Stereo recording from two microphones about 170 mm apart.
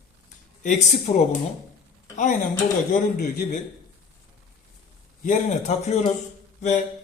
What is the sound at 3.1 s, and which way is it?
Speech, 60° left (ahead or behind).